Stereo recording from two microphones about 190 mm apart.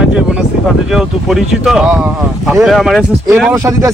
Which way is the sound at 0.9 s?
Centre (ahead or behind).